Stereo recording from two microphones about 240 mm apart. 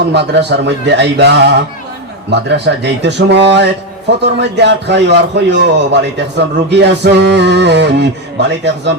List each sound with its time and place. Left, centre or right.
0.1 s a man's voice: right